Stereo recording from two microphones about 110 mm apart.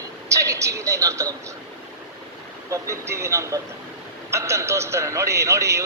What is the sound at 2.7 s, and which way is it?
A man's voice, 25° right (ahead or behind).